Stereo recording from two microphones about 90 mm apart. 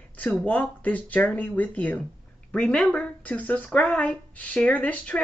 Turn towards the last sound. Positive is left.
turn(degrees=15)  # may be behind; listen again after turning